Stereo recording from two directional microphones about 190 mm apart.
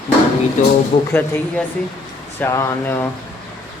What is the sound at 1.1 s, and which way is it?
Speech, 10° left (ahead or behind).